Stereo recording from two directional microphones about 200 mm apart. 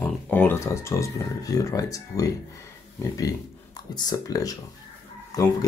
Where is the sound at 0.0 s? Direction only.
10° left (ahead or behind).